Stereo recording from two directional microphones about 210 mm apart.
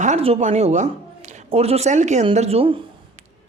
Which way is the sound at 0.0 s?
30° right (ahead or behind).